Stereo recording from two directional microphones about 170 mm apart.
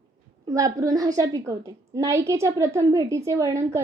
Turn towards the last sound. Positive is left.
turn(degrees=-20)  # may be behind; listen again after turning